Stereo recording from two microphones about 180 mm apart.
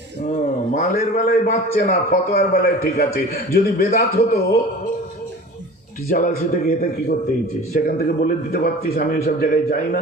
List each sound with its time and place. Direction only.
0.7 s a man's voice: 40° left (ahead or behind)
1.9 s a man's voice: 55° left (ahead or behind)
6.1 s a man's voice: 50° left (ahead or behind)